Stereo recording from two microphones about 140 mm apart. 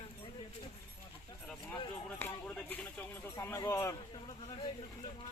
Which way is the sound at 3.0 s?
15° left (ahead or behind).